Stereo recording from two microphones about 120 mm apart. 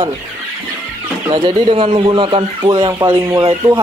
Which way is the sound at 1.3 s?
55° right (ahead or behind).